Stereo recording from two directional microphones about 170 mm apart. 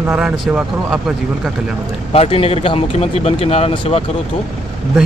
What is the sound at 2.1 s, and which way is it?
A man's voice, 35° left (ahead or behind).